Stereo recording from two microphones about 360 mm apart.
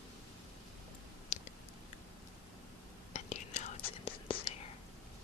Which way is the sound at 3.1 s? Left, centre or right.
Centre.